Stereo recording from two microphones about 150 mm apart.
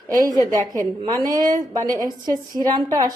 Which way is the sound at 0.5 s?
25° right (ahead or behind).